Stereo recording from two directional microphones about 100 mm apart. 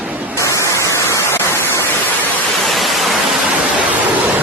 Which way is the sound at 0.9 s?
30° left (ahead or behind).